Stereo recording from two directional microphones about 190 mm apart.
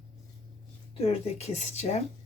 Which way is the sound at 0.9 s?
35° left (ahead or behind).